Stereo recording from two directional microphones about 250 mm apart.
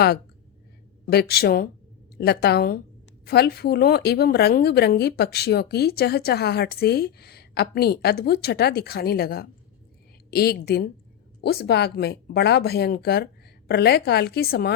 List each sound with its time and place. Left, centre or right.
1.0 s a woman's voice: left